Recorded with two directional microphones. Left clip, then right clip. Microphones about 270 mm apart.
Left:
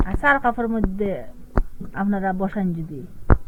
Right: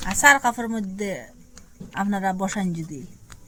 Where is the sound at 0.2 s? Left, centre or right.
Centre.